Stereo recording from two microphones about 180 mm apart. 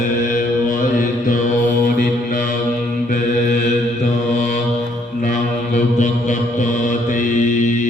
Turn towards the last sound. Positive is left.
turn(degrees=45)  # may be behind; listen again after turning